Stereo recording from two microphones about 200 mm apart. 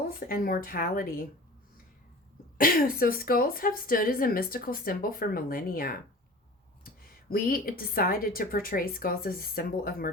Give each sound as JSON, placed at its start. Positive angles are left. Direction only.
{"t": 0.3, "sound": "a woman's voice", "side_deg": 45}
{"t": 2.6, "sound": "a woman's voice", "side_deg": 45}
{"t": 7.3, "sound": "a woman's voice", "side_deg": 45}